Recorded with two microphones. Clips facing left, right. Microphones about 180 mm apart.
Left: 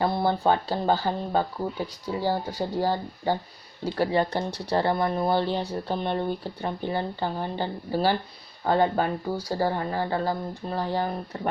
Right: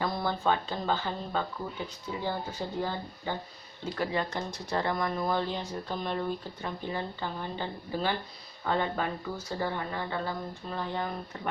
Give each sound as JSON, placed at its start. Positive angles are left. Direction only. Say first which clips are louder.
{"t": 0.0, "sound": "speech", "louder": "left 6 dB", "side_deg": 30}